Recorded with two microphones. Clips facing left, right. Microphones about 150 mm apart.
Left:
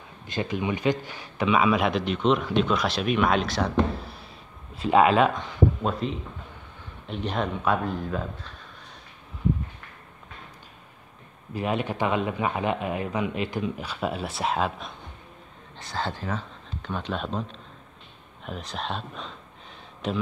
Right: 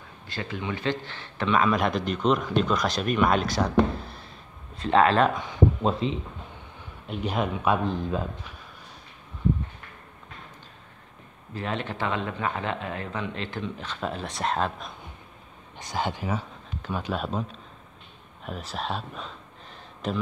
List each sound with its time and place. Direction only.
0.3 s a man's voice: 20° left (ahead or behind); by 3.7 s centre (ahead or behind)
4.0 s a sound: 5° left (ahead or behind)
4.7 s speech: 10° left (ahead or behind)
5.3 s a sound: 5° right (ahead or behind)
7.1 s a man's voice: 5° right (ahead or behind)
7.6 s speech: 15° right (ahead or behind)
11.5 s speech: 15° left (ahead or behind)
15.8 s a man's voice: 15° right (ahead or behind)